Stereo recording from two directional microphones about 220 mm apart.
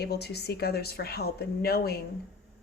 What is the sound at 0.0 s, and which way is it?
A woman's voice, 45° left (ahead or behind).